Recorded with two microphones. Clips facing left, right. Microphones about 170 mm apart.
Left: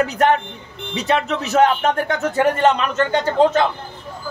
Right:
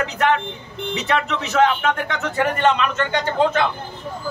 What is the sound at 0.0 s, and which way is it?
A man's voice, 40° left (ahead or behind).